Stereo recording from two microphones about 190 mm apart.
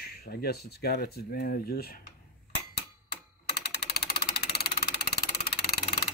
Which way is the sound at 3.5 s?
60° left (ahead or behind).